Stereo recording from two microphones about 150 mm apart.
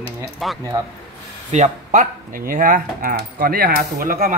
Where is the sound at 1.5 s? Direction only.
55° right (ahead or behind).